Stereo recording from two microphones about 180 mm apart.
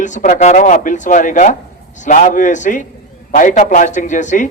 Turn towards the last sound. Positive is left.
turn(degrees=45)  # may be behind; listen again after turning